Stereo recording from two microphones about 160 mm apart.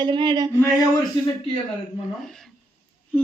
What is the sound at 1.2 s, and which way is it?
Speech, 30° left (ahead or behind).